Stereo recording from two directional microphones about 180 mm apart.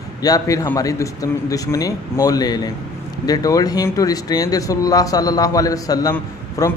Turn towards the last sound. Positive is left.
turn(degrees=15)  # may be behind; listen again after turning